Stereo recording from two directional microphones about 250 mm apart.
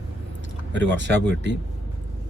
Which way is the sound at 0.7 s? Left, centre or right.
Right.